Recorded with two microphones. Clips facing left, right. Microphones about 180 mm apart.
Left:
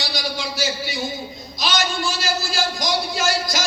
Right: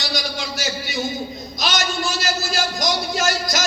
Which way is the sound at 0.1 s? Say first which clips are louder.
Even; 45° right (ahead or behind).